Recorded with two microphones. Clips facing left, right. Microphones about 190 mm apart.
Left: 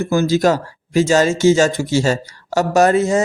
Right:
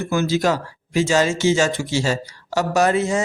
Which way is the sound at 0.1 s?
40° left (ahead or behind).